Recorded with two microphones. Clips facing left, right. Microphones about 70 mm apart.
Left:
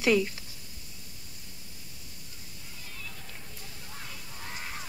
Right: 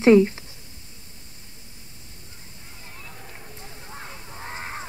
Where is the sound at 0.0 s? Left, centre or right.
Right.